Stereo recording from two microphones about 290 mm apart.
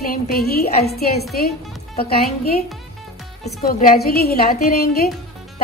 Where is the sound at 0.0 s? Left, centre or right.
Left.